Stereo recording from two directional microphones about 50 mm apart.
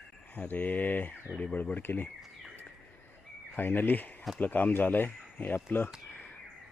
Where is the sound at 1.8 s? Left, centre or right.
Left.